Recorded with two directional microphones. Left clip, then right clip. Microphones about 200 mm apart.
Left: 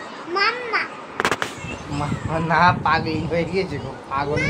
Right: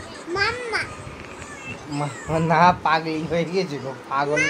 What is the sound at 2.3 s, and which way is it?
A man's voice, 30° right (ahead or behind).